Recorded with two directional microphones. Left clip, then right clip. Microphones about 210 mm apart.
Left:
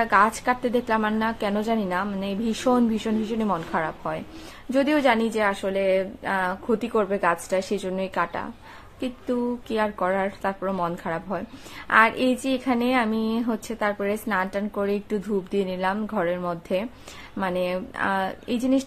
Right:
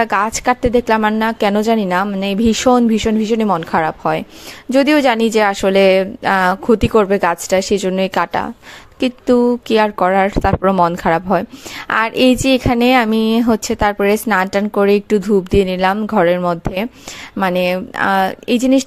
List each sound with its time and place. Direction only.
0.0 s a woman's voice: 45° right (ahead or behind)